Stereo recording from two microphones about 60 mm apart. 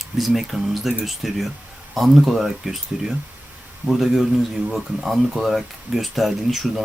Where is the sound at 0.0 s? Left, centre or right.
Centre.